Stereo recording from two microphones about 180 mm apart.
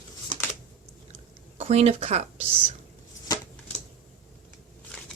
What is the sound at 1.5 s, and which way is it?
Speech, 35° right (ahead or behind).